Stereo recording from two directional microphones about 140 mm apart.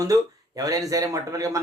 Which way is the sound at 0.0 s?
25° right (ahead or behind).